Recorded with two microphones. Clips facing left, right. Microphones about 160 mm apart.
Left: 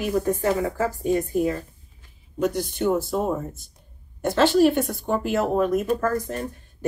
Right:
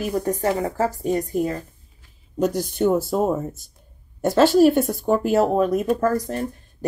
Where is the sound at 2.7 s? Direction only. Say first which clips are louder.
Right 3 dB; 45° right (ahead or behind).